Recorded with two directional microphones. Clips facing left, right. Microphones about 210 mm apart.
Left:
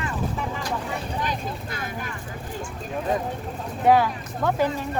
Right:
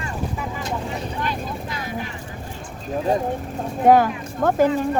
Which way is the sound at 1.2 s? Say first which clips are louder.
Right 2 dB; 50° left (ahead or behind).